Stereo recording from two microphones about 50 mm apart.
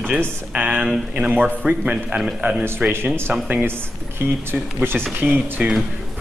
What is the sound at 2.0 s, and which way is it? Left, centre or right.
Speech, centre.